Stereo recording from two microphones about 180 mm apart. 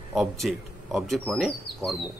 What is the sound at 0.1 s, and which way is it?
Speech, centre (ahead or behind).